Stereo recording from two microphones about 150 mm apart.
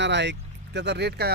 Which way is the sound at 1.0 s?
90° right.